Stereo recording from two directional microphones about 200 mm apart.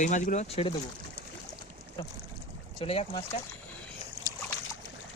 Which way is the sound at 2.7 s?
30° left (ahead or behind).